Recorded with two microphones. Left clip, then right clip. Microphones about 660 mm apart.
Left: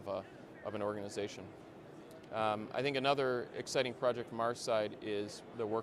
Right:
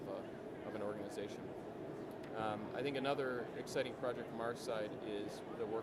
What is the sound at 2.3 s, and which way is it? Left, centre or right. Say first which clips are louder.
Speech: left 7 dB; left.